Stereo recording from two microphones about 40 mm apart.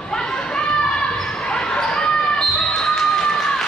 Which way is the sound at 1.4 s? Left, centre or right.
Left.